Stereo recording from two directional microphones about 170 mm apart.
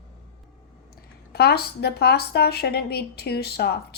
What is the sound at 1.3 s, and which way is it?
Speech, 70° left (ahead or behind).